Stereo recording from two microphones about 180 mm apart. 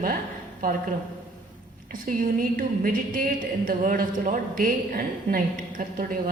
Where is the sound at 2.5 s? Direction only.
50° right (ahead or behind).